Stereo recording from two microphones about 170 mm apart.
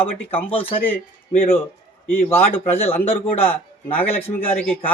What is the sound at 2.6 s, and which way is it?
Speech, 35° left (ahead or behind).